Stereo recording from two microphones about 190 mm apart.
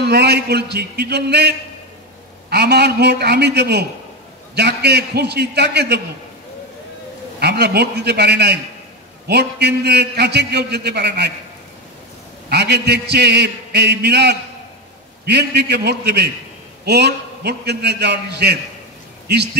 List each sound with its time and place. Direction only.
0.0 s a man's voice: 60° right (ahead or behind)
2.5 s a man's voice: 60° right (ahead or behind)
7.3 s a man's voice: 60° right (ahead or behind)
12.4 s a man's voice: 60° right (ahead or behind)